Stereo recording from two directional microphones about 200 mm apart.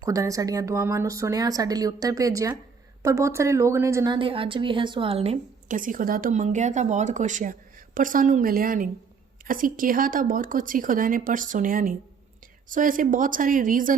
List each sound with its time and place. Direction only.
0.0 s a woman's voice: 15° right (ahead or behind); by 13.9 s 40° right (ahead or behind)